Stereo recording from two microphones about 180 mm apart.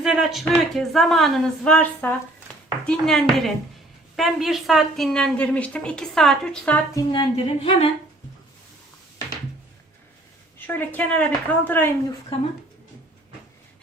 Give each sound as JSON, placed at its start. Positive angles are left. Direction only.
{"t": 0.0, "sound": "a woman's voice", "side_deg": -5}
{"t": 6.9, "sound": "speech", "side_deg": 25}
{"t": 10.7, "sound": "a woman's voice", "side_deg": 10}